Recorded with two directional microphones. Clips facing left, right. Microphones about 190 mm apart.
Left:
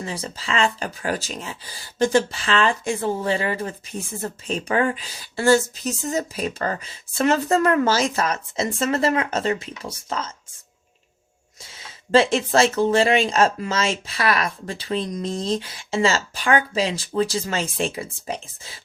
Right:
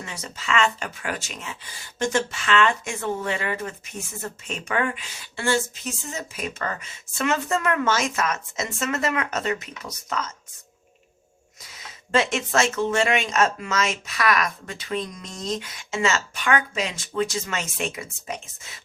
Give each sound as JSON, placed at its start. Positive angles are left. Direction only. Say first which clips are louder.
{"t": 0.0, "sound": "speech", "louder": "left 5 dB", "side_deg": 30}
{"t": 11.6, "sound": "speech", "louder": "left 1 dB", "side_deg": 30}